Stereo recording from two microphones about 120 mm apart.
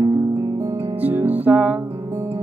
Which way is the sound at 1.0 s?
15° right (ahead or behind).